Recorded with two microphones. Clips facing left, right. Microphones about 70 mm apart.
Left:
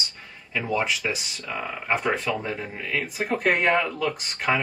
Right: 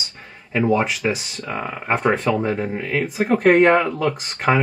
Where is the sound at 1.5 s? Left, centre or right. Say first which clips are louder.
Right 4 dB; right.